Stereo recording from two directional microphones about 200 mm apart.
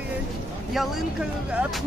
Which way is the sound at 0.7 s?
Centre (ahead or behind).